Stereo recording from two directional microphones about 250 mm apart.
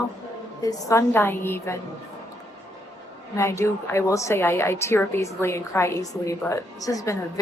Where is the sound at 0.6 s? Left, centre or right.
Centre.